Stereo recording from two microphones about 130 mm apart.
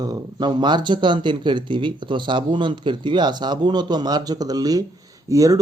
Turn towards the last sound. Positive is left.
turn(degrees=-25)  # may be behind; listen again after turning